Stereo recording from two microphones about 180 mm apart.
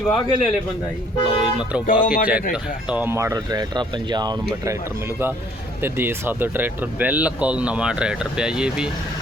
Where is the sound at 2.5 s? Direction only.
10° right (ahead or behind).